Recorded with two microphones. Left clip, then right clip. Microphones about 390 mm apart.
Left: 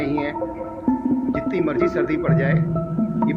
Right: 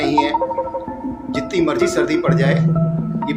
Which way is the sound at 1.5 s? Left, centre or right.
Left.